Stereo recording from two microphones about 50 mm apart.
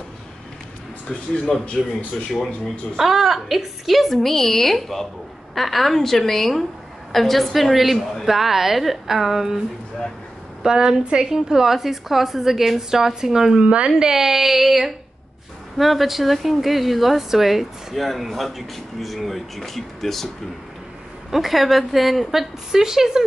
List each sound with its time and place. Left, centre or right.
1.8 s speech: centre
3.0 s a woman's voice: centre
10.6 s a woman's voice: centre
21.3 s a woman's voice: centre